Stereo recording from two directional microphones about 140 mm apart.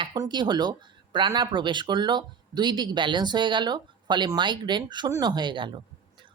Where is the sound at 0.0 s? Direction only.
30° right (ahead or behind).